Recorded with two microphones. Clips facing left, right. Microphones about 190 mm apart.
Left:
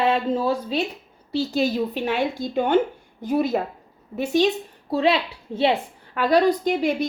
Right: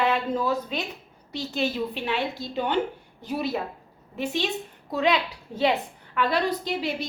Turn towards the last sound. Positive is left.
turn(degrees=50)  # may be behind; listen again after turning